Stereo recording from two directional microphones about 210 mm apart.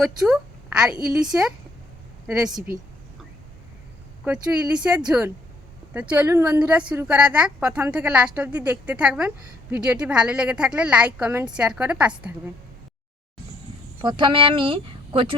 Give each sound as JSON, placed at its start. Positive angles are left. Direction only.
{"t": 0.0, "sound": "a woman's voice", "side_deg": 0}
{"t": 4.2, "sound": "a woman's voice", "side_deg": -5}
{"t": 14.0, "sound": "speech", "side_deg": -20}